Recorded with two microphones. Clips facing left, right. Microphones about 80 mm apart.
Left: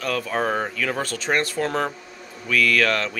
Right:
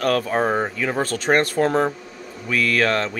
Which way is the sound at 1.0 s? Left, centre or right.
Right.